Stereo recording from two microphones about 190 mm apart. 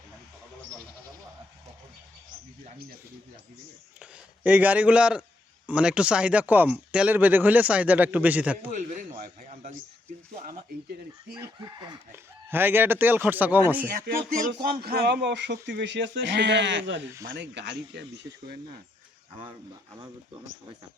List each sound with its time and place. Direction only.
4.0 s speech: 5° right (ahead or behind)
8.7 s a man's voice: 45° right (ahead or behind)
11.3 s speech: 20° right (ahead or behind)
14.5 s speech: 55° right (ahead or behind)